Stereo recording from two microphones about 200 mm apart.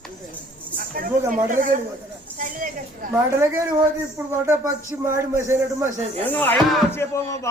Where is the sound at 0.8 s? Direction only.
45° right (ahead or behind).